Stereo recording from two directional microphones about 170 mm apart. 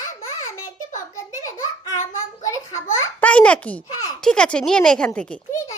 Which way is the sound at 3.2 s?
10° left (ahead or behind).